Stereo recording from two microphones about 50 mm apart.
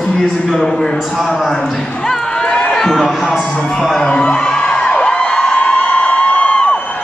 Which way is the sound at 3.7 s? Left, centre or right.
Centre.